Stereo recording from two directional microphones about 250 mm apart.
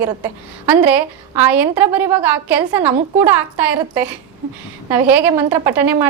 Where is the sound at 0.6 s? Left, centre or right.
Centre.